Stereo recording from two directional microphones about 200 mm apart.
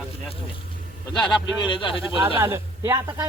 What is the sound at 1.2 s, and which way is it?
Speech, 25° left (ahead or behind).